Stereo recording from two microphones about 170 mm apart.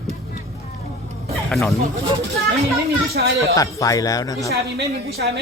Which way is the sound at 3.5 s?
20° left (ahead or behind).